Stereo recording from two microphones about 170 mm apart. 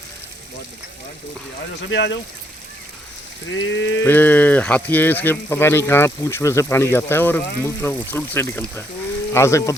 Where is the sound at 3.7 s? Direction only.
90° left.